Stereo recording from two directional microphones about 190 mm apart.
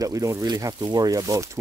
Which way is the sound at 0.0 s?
15° right (ahead or behind).